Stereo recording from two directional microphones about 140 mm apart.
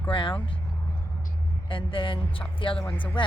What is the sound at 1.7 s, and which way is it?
Speech, 35° left (ahead or behind).